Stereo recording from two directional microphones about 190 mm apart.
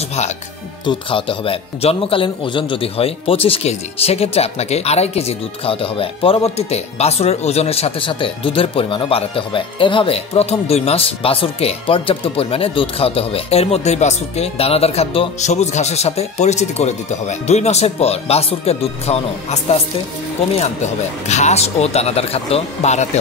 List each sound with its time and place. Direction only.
0.8 s a man's voice: 25° left (ahead or behind)